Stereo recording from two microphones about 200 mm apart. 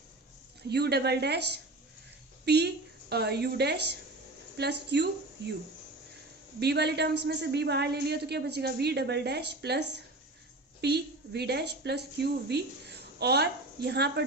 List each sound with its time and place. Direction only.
0.7 s a woman's voice: 55° right (ahead or behind)
2.4 s a woman's voice: 55° right (ahead or behind)
6.6 s a woman's voice: 55° right (ahead or behind)